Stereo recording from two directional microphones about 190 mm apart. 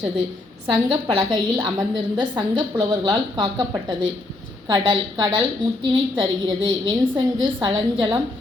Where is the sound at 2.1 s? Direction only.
25° right (ahead or behind).